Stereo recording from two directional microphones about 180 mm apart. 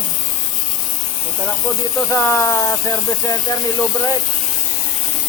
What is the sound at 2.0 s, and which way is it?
Speech, 15° left (ahead or behind).